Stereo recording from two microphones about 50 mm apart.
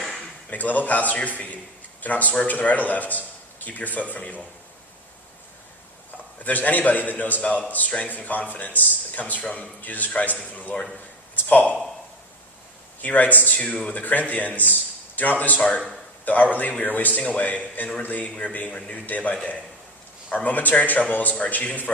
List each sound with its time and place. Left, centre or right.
0.5 s speech: left
6.4 s a man's voice: left
13.0 s a man's voice: left